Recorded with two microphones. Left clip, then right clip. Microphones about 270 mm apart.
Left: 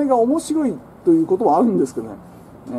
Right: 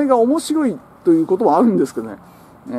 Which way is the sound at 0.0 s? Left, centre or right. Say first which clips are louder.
Right 2 dB; centre.